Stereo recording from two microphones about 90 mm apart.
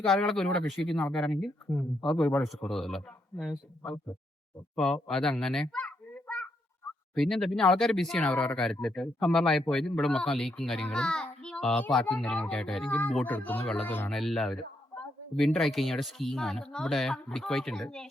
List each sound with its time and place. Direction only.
0.0 s a child's voice: 5° left (ahead or behind)
14.1 s speech: 5° left (ahead or behind)